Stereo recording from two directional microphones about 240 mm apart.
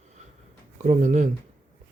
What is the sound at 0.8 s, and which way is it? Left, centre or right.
Speech, right.